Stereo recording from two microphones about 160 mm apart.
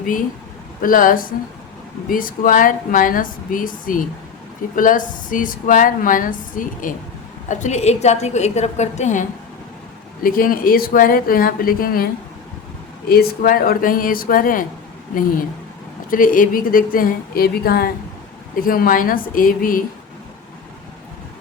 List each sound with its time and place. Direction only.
0.0 s a woman's voice: 60° left (ahead or behind)
10.2 s a woman's voice: 65° left (ahead or behind)
13.1 s a woman's voice: 70° left (ahead or behind)
16.0 s a woman's voice: 60° left (ahead or behind)